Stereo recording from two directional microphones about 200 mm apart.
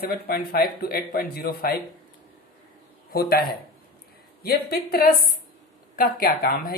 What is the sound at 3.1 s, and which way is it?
A man's voice, 50° left (ahead or behind).